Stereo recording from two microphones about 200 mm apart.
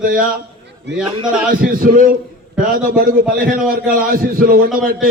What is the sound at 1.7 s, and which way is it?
A man's voice, 45° right (ahead or behind).